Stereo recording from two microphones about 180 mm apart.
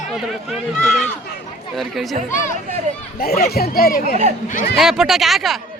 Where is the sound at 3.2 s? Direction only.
55° left (ahead or behind).